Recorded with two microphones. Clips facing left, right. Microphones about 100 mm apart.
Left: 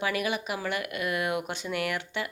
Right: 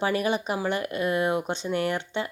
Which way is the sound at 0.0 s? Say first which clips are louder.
Right 4 dB; 30° right (ahead or behind).